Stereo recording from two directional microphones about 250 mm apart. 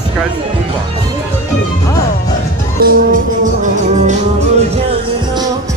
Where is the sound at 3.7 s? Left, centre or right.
Right.